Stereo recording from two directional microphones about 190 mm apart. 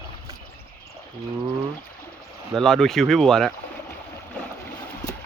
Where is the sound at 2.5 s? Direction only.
5° left (ahead or behind).